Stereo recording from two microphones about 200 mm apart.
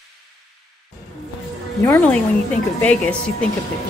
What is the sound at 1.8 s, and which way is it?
Music, 10° left (ahead or behind).